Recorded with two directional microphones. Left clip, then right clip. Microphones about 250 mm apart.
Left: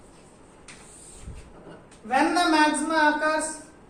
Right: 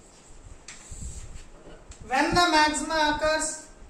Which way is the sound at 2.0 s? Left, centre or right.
Centre.